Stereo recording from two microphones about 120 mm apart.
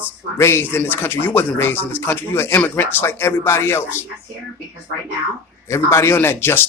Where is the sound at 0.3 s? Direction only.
20° left (ahead or behind).